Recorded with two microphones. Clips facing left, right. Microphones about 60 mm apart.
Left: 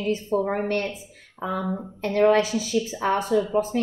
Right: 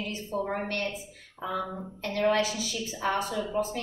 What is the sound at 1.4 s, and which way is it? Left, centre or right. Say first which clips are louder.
Speech: left 4 dB; left.